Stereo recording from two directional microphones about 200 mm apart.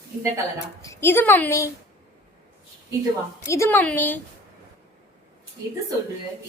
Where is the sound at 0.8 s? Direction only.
15° left (ahead or behind).